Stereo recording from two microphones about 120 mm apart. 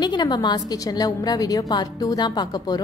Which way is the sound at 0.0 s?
35° left (ahead or behind).